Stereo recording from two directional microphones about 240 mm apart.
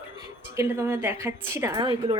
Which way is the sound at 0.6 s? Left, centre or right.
Centre.